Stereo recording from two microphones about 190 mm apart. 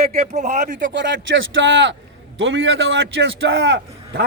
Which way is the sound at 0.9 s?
75° right (ahead or behind).